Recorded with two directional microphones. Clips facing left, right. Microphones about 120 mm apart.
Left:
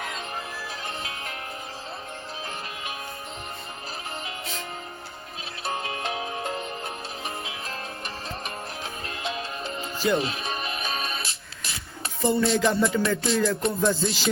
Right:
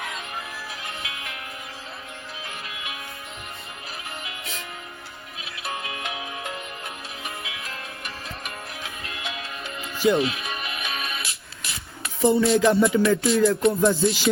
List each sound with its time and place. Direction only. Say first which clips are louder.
1.0 s music: left 1 dB; 35° left (ahead or behind)
4.2 s music: left 2 dB; 35° left (ahead or behind)
5.6 s music: left 2 dB; 35° left (ahead or behind)
12.2 s music: right 4 dB; 5° right (ahead or behind)